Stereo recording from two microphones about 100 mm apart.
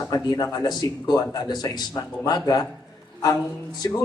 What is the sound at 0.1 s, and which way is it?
Speech, 45° left (ahead or behind).